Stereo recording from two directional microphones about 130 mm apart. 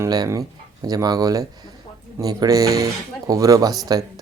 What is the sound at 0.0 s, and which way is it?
Speech, 25° right (ahead or behind).